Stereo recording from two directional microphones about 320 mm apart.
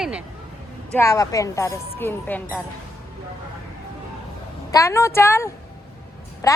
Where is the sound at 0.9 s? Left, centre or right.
Centre.